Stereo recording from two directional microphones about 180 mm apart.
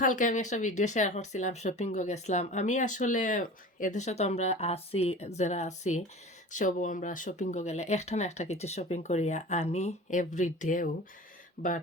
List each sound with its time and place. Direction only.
0.0 s speech: 45° left (ahead or behind)
11.6 s speech: 55° left (ahead or behind)